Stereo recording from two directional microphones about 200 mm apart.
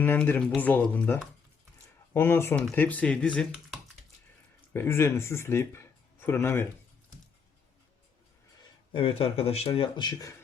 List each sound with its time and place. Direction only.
0.0 s speech: 10° left (ahead or behind)
8.9 s speech: 25° left (ahead or behind)